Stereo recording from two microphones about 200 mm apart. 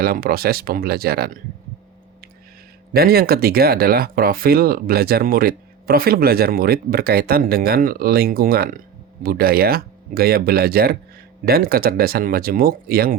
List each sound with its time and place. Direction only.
0.0 s speech: 50° right (ahead or behind)
2.9 s speech: 50° right (ahead or behind)